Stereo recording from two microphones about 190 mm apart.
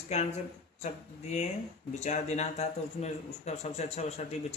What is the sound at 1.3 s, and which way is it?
Speech, 35° left (ahead or behind).